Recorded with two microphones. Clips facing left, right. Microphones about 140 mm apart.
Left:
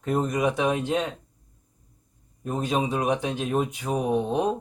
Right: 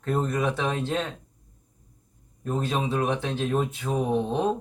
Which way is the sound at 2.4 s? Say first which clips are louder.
Left 1 dB; 10° left (ahead or behind).